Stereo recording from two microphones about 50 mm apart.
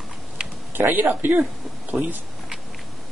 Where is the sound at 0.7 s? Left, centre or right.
Right.